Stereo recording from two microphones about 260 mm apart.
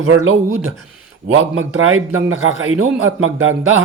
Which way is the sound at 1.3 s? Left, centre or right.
Right.